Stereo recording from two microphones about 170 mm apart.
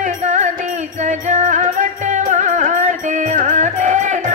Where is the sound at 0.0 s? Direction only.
45° right (ahead or behind).